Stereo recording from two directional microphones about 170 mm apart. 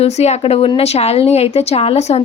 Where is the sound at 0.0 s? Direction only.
40° left (ahead or behind).